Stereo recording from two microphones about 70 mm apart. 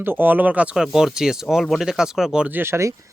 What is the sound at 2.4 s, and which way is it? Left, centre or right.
Speech, right.